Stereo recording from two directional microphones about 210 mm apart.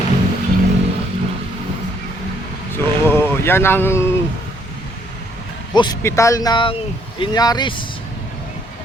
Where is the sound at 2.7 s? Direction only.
10° left (ahead or behind).